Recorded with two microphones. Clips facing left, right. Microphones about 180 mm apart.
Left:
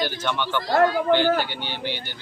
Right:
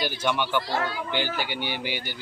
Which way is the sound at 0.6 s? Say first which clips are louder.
Left 10 dB; 45° left (ahead or behind).